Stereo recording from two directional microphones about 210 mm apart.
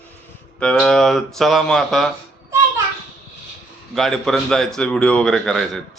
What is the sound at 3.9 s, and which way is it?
Speech, centre (ahead or behind).